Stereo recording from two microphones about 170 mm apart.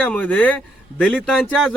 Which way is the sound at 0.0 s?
10° left (ahead or behind).